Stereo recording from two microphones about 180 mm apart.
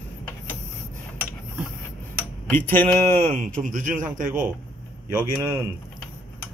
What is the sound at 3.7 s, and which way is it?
Speech, 45° right (ahead or behind).